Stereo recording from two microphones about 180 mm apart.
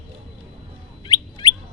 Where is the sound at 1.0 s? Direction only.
25° left (ahead or behind).